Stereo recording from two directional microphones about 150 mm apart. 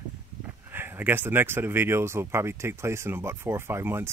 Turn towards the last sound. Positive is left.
turn(degrees=-15)  # may be behind; listen again after turning